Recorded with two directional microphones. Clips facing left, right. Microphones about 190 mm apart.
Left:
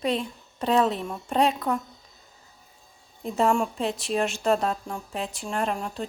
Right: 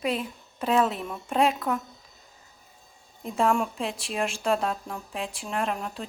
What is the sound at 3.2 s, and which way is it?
A woman's voice, centre (ahead or behind).